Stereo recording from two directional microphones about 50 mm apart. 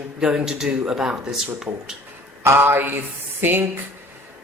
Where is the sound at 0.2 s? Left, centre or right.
Centre.